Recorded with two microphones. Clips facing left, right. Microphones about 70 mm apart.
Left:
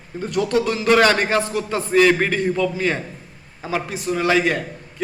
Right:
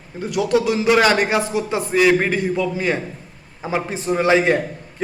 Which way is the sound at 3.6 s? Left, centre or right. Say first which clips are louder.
Right 2 dB; right.